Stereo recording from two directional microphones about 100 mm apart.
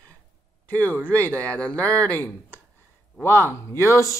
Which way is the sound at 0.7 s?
15° left (ahead or behind).